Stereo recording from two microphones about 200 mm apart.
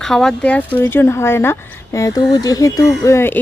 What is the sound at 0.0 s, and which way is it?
Speech, centre (ahead or behind).